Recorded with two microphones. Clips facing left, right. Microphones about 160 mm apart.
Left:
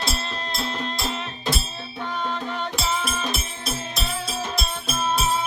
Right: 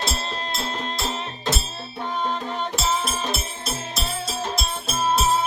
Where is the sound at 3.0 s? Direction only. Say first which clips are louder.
Even; 30° right (ahead or behind).